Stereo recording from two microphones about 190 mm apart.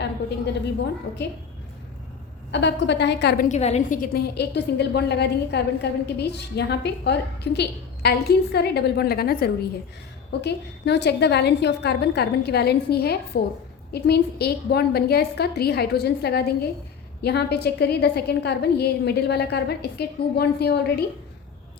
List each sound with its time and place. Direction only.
2.5 s a woman's voice: 65° left (ahead or behind)
3.5 s a woman's voice: 35° left (ahead or behind); by 21.0 s 55° left (ahead or behind)